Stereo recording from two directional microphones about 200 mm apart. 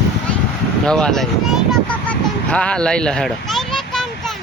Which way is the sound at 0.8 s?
5° left (ahead or behind).